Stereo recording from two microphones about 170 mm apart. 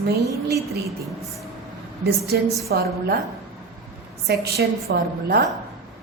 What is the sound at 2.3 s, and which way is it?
Speech, 75° right (ahead or behind).